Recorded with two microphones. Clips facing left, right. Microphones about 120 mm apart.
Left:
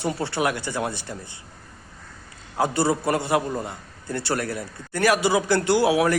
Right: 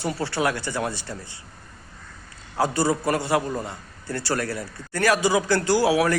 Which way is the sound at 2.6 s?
20° left (ahead or behind).